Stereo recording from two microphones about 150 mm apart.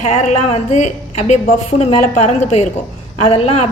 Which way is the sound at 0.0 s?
55° left (ahead or behind).